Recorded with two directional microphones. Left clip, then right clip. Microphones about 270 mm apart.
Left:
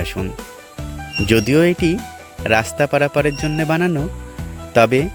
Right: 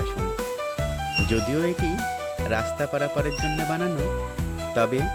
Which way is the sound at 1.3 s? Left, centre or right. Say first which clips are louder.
Left 15 dB; left.